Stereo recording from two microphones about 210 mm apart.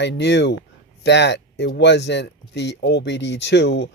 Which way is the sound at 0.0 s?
55° left (ahead or behind).